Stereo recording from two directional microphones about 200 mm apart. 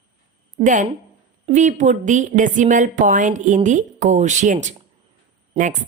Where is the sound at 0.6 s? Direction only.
40° right (ahead or behind).